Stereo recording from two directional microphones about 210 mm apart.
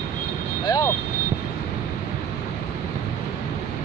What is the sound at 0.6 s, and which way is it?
Vehicle, 15° left (ahead or behind).